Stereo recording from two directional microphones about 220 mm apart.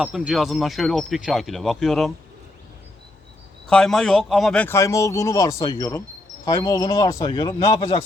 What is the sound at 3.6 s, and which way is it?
Speech, centre (ahead or behind).